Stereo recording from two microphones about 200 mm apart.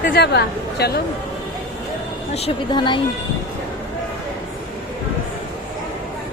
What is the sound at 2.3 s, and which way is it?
Speech, 30° left (ahead or behind).